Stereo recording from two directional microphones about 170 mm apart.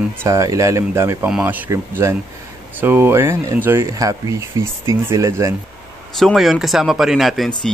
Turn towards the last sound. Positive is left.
turn(degrees=0)  # may be behind; listen again after turning